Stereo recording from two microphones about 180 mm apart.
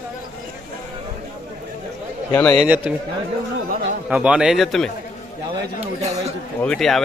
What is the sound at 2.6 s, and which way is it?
Speech, 5° right (ahead or behind).